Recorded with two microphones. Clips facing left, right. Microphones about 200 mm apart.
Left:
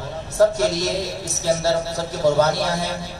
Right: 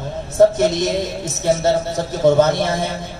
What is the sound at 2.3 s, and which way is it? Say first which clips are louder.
Speech: right 4 dB; 20° right (ahead or behind).